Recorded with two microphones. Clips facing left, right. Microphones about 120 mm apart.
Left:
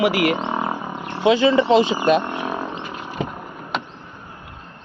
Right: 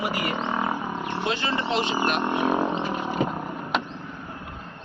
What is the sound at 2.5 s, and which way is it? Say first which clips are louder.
Roaring cats: right 4 dB; 20° right (ahead or behind).